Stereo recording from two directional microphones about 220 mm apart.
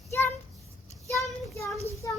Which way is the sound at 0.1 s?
10° left (ahead or behind).